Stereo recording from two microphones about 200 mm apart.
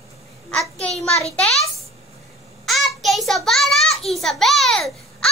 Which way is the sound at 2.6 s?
Centre (ahead or behind).